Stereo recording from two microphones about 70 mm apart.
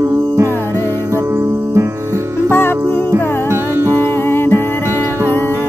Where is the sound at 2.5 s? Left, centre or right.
Left.